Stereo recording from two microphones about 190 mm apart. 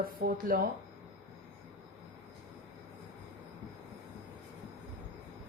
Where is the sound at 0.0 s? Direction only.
50° right (ahead or behind).